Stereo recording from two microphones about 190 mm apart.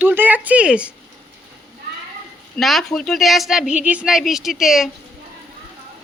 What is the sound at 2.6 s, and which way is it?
Speech, centre (ahead or behind).